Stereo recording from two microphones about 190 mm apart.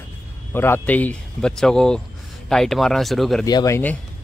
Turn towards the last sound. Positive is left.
turn(degrees=15)  # may be behind; listen again after turning